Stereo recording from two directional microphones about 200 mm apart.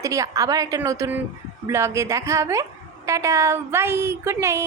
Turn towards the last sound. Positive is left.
turn(degrees=-15)  # may be behind; listen again after turning